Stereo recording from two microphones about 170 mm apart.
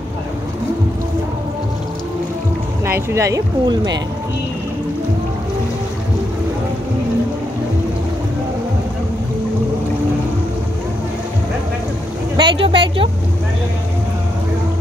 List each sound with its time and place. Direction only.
2.8 s speech: 15° right (ahead or behind)
12.4 s speech: 30° right (ahead or behind)